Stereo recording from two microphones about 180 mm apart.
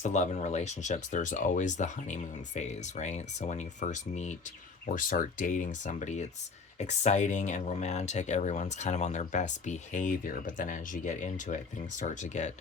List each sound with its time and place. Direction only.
0.0 s speech: 40° left (ahead or behind)